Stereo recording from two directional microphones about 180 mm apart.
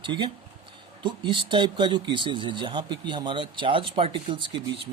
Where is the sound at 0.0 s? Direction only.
25° right (ahead or behind).